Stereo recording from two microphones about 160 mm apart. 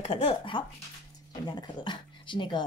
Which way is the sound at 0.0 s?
35° left (ahead or behind).